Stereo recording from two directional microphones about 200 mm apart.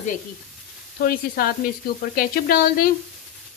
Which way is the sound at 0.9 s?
50° left (ahead or behind).